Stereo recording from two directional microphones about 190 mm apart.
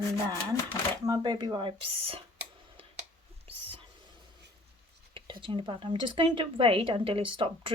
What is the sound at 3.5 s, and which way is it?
Whispering, 30° right (ahead or behind).